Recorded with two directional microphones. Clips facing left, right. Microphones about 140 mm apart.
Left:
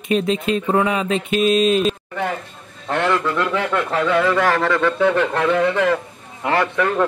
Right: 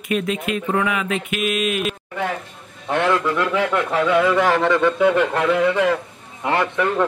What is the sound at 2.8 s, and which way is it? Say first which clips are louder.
A man's voice: even; 10° right (ahead or behind).